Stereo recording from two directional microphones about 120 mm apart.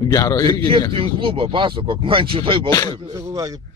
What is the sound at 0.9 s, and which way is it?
Speech, 50° right (ahead or behind).